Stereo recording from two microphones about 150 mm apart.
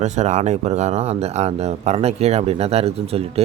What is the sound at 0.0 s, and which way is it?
Speech, 50° right (ahead or behind).